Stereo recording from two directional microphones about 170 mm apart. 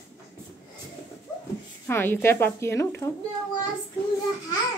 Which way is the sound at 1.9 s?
15° left (ahead or behind).